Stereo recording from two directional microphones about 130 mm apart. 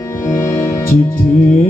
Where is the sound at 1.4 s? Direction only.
65° left (ahead or behind).